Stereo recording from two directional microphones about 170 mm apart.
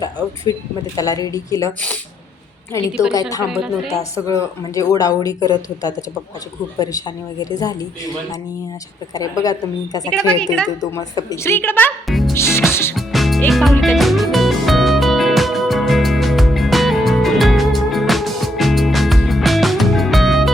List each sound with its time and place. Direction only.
0.5 s a woman's voice: 20° left (ahead or behind)
3.1 s a woman's voice: 20° left (ahead or behind)
6.7 s a woman's voice: 25° left (ahead or behind)
9.4 s a woman's voice: 20° left (ahead or behind)
10.3 s a woman's voice: 5° left (ahead or behind)
10.8 s a woman's voice: 20° left (ahead or behind)
12.0 s music: centre (ahead or behind)
12.3 s music: 15° left (ahead or behind)
13.0 s music: centre (ahead or behind)
13.5 s speech: centre (ahead or behind)
13.8 s music: centre (ahead or behind)